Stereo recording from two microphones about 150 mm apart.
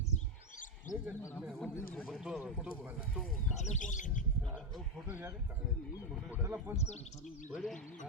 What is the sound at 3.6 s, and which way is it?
Speech, 55° left (ahead or behind).